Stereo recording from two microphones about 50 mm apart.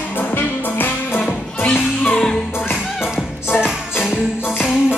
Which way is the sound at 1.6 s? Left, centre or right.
Left.